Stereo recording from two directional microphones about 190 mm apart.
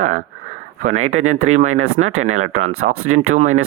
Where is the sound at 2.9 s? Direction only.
90° right.